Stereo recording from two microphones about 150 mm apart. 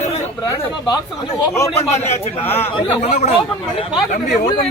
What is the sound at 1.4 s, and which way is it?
Speech, 20° left (ahead or behind).